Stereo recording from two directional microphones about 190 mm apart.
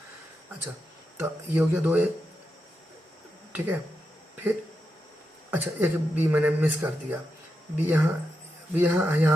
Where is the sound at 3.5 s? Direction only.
10° right (ahead or behind).